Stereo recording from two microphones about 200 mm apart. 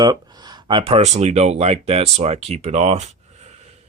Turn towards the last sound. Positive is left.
turn(degrees=-35)  # may be behind; listen again after turning